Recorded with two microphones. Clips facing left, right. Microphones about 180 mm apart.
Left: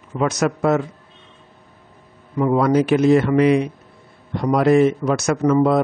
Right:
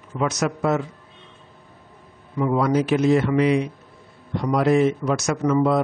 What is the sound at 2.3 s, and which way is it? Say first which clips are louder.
A man's voice: left 4 dB; 50° left (ahead or behind).